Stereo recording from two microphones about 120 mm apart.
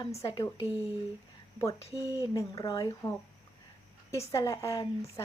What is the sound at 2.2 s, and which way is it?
Speech, 30° left (ahead or behind).